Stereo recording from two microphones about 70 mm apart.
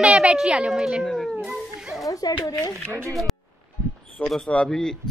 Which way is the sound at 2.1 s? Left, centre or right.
Left.